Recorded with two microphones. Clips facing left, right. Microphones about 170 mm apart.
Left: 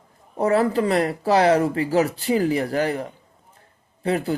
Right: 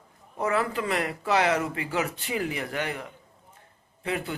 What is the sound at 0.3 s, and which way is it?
Speech, 35° left (ahead or behind).